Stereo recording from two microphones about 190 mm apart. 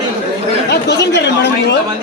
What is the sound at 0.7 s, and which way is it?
Speech, 65° left (ahead or behind).